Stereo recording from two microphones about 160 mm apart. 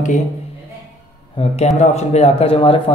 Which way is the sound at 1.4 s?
35° left (ahead or behind).